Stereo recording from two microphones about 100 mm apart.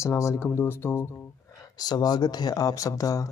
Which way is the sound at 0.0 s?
30° left (ahead or behind).